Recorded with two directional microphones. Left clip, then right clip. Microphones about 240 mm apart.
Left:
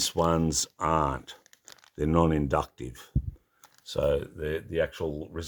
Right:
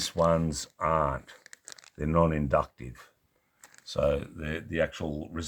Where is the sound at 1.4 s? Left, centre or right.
Centre.